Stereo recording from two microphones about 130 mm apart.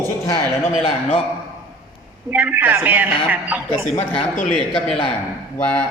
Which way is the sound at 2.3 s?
15° right (ahead or behind).